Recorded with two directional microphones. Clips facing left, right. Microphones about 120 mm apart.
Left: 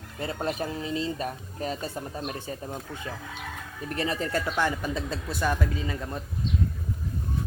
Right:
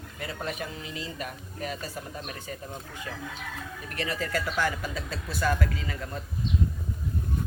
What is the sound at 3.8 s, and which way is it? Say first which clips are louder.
Speech: left 4 dB; 30° left (ahead or behind).